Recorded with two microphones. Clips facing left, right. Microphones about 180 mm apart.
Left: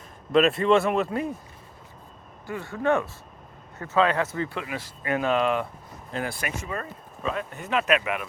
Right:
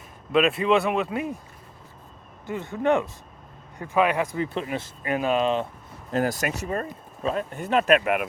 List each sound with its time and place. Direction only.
0.3 s speech: 5° right (ahead or behind)
2.5 s speech: 20° right (ahead or behind)
4.6 s speech: 30° right (ahead or behind)
5.0 s speech: 15° right (ahead or behind)
6.1 s speech: 40° right (ahead or behind)